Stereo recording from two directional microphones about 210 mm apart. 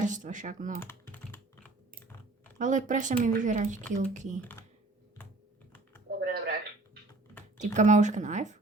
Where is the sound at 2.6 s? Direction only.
35° right (ahead or behind).